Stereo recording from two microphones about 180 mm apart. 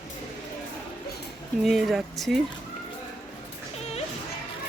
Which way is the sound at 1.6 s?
Centre (ahead or behind).